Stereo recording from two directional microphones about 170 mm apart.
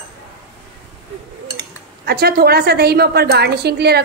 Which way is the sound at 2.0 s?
65° right (ahead or behind).